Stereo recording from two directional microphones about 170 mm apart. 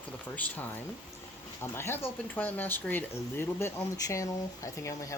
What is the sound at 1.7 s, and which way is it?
Speech, 15° left (ahead or behind).